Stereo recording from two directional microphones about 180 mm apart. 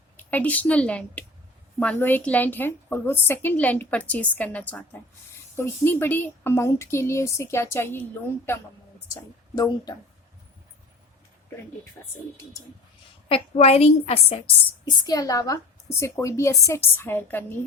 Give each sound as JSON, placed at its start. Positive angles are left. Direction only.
{"t": 0.2, "sound": "a woman's voice", "side_deg": 10}
{"t": 9.6, "sound": "a woman's voice", "side_deg": 20}
{"t": 13.2, "sound": "a woman's voice", "side_deg": 35}